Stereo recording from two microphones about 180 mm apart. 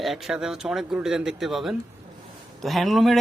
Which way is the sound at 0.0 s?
Centre (ahead or behind).